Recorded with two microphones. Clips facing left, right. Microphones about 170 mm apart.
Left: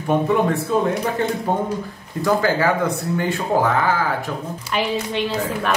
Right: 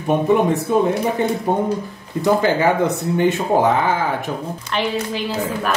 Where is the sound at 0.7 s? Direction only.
20° right (ahead or behind).